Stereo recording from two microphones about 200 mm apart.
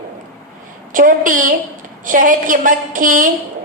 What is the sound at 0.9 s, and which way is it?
A woman's voice, 40° right (ahead or behind).